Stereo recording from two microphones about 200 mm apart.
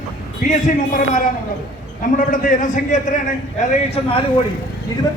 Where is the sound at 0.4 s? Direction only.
40° left (ahead or behind).